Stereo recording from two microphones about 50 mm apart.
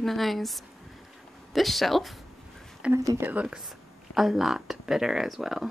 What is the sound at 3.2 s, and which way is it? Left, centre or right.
Speech, right.